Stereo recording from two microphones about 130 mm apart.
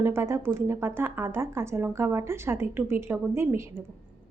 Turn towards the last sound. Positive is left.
turn(degrees=-20)  # may be behind; listen again after turning